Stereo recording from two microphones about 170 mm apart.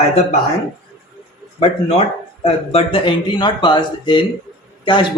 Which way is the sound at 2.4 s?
35° left (ahead or behind).